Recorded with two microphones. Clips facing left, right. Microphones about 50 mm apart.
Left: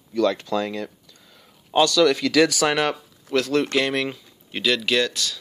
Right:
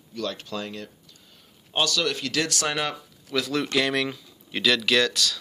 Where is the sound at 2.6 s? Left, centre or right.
Left.